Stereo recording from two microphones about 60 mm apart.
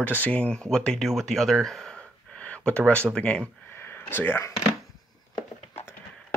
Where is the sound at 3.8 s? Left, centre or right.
Left.